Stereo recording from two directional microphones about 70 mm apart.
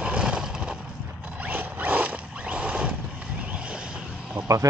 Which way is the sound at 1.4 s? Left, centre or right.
Right.